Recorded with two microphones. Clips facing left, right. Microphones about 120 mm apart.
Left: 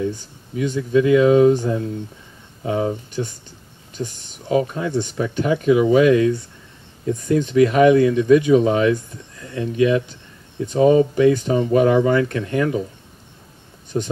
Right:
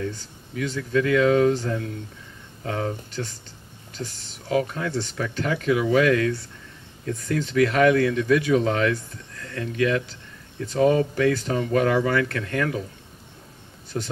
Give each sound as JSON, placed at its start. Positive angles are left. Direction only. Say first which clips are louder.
{"t": 0.0, "sound": "speech", "louder": "left 6 dB", "side_deg": 20}
{"t": 13.9, "sound": "speech", "louder": "left 6 dB", "side_deg": 20}